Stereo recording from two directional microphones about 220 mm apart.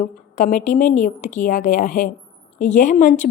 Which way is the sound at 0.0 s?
35° left (ahead or behind).